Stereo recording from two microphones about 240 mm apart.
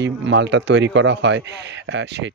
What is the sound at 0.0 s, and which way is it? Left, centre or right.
Speech, right.